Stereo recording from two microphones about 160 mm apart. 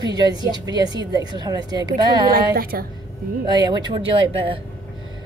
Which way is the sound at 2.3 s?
70° right (ahead or behind).